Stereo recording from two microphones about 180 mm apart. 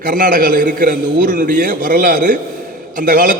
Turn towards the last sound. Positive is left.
turn(degrees=-50)  # may be behind; listen again after turning